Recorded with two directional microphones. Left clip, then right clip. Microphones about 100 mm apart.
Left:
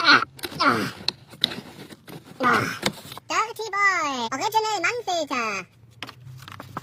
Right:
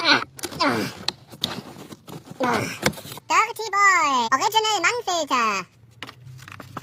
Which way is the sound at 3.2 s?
60° right (ahead or behind).